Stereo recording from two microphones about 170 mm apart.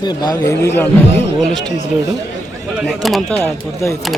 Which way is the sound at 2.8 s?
Centre (ahead or behind).